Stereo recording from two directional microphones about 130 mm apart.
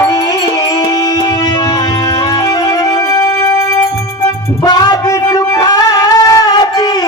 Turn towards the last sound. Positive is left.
turn(degrees=30)  # may be behind; listen again after turning